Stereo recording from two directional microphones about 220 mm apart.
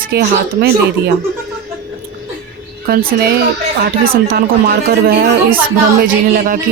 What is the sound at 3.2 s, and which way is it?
Speech, 45° right (ahead or behind).